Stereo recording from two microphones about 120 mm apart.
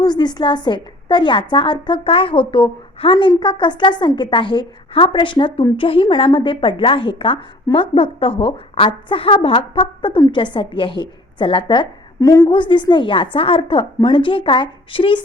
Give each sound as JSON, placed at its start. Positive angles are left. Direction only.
{"t": 0.0, "sound": "a woman's voice", "side_deg": 35}